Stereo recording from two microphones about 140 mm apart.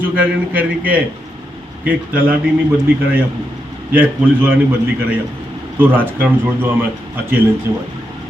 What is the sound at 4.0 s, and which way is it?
Speech, 15° right (ahead or behind).